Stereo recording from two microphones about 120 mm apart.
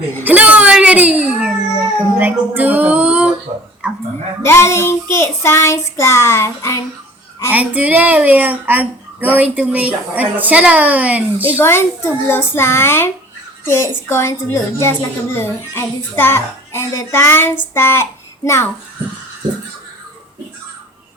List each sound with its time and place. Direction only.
0.3 s music: 10° right (ahead or behind)
2.1 s speech: 15° right (ahead or behind)
4.4 s child singing: 20° left (ahead or behind)
7.5 s speech: 15° right (ahead or behind)
11.6 s music: 20° left (ahead or behind)
17.7 s a child's voice: 20° left (ahead or behind)